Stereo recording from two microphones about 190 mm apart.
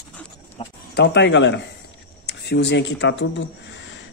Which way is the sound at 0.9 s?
65° left (ahead or behind).